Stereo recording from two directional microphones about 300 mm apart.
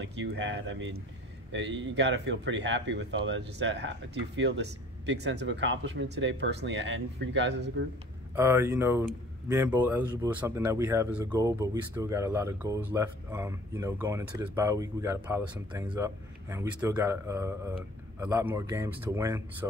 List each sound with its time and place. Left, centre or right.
0.0 s speech: right
8.4 s speech: centre